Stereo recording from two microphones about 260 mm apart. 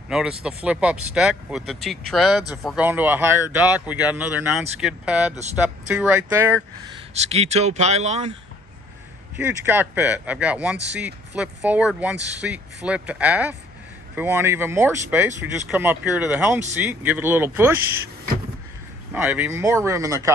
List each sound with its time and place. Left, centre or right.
0.1 s speech: centre
7.2 s speech: right
9.4 s speech: centre
19.1 s speech: centre